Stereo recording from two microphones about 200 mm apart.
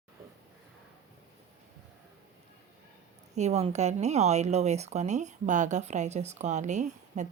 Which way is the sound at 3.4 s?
35° right (ahead or behind).